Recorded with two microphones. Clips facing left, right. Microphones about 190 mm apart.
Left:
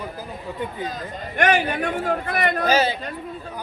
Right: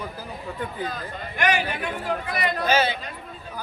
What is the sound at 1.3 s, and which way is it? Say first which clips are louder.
A man's voice: left 4 dB; 45° left (ahead or behind).